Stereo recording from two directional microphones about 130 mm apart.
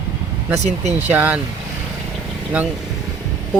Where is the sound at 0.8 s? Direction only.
60° right (ahead or behind).